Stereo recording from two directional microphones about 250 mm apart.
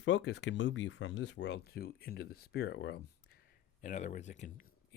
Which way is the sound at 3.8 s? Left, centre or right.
Left.